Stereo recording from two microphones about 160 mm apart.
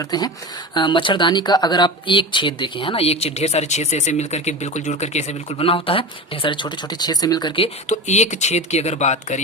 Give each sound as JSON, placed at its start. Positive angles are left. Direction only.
{"t": 0.0, "sound": "speech", "side_deg": 25}
{"t": 7.9, "sound": "speech", "side_deg": 45}